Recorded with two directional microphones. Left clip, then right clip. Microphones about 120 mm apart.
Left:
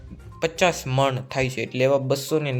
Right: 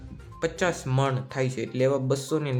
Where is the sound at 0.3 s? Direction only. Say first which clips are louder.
Left 5 dB; 15° left (ahead or behind).